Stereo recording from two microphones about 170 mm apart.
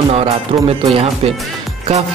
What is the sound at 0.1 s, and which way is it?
Speech, 35° right (ahead or behind).